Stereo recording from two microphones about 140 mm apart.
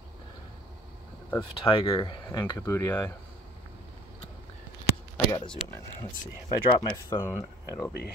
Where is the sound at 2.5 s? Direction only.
20° left (ahead or behind).